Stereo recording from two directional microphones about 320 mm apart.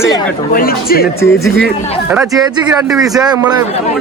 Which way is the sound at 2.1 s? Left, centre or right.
Centre.